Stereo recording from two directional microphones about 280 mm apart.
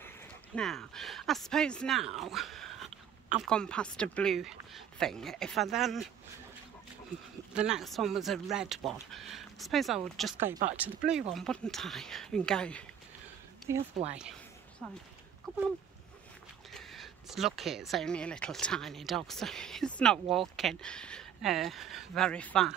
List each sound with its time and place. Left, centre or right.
0.6 s speech: centre
7.5 s speech: centre
14.0 s speech: centre
14.8 s speech: centre
16.7 s speech: centre